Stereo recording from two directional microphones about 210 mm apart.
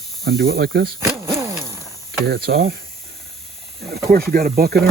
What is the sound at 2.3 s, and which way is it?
Speech, 50° right (ahead or behind).